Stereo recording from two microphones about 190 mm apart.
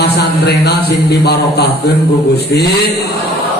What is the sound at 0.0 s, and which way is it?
Speech, 60° left (ahead or behind).